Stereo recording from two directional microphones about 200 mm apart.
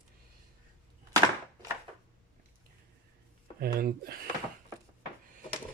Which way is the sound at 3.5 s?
50° right (ahead or behind).